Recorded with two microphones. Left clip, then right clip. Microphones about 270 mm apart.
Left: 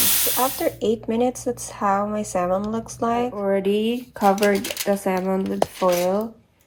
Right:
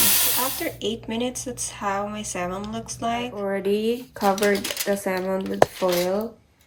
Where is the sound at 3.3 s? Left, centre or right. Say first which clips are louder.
Left 3 dB; left.